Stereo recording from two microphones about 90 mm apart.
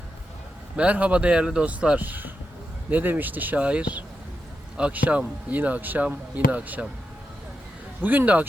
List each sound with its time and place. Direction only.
0.8 s speech: 15° right (ahead or behind)
8.0 s speech: 20° right (ahead or behind)